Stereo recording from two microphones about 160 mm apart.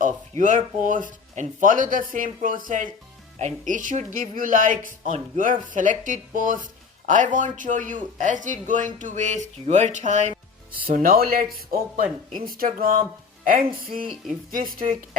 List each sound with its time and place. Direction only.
0.0 s speech: 55° right (ahead or behind)
10.8 s speech: 60° right (ahead or behind)
12.5 s speech: 65° right (ahead or behind)
13.9 s speech: 45° right (ahead or behind)
14.5 s speech: 65° right (ahead or behind)